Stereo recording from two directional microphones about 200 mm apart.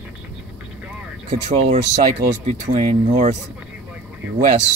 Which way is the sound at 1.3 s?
35° right (ahead or behind).